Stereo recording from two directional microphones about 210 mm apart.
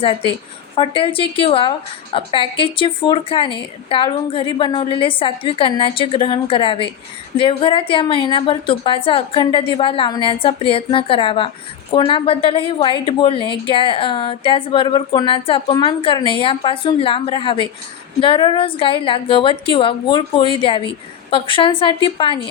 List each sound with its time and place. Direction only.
0.8 s a woman's voice: 25° left (ahead or behind)